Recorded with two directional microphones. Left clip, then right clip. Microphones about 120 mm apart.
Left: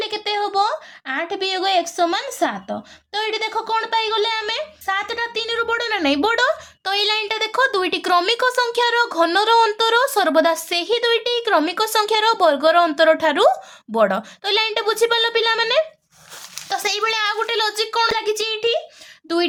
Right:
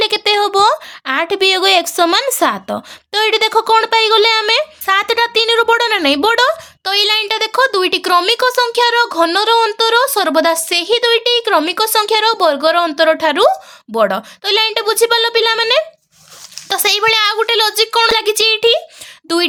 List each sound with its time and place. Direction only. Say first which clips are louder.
0.0 s a woman's voice: right 9 dB; 75° right (ahead or behind); by 15.8 s 30° right (ahead or behind)
16.6 s a child's voice: right 8 dB; 50° right (ahead or behind)
19.3 s speech: right 5 dB; 55° right (ahead or behind)